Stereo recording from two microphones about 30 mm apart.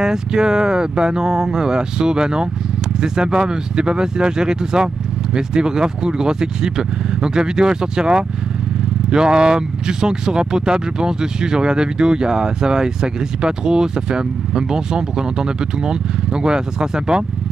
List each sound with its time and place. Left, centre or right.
0.0 s speech: right